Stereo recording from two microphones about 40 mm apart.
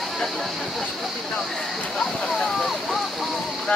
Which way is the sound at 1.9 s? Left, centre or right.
Centre.